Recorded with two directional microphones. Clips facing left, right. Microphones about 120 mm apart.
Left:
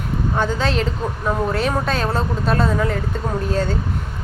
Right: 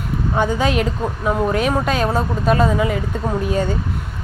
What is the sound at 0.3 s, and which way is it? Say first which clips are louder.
Speech: right 3 dB; 15° right (ahead or behind).